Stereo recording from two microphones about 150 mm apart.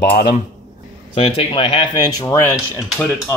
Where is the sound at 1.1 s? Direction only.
40° left (ahead or behind).